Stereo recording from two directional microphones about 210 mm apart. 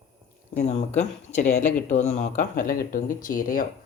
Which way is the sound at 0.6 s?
35° left (ahead or behind).